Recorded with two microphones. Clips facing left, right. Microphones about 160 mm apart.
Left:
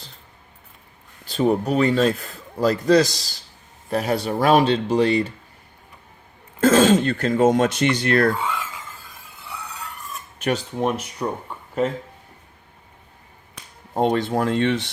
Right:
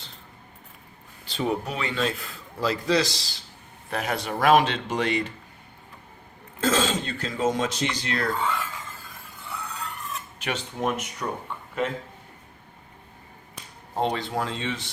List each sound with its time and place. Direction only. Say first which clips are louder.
1.3 s speech: left 8 dB; 40° left (ahead or behind)
6.6 s speech: left 9 dB; 55° left (ahead or behind)
8.3 s a sound: left 2 dB; 15° left (ahead or behind)
10.4 s speech: left 6 dB; 35° left (ahead or behind)
13.9 s speech: left 6 dB; 50° left (ahead or behind)